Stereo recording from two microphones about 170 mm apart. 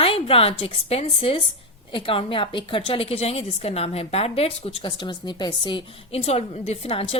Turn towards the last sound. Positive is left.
turn(degrees=35)  # may be behind; listen again after turning